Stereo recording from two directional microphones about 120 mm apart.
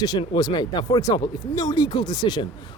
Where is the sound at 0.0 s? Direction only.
35° left (ahead or behind).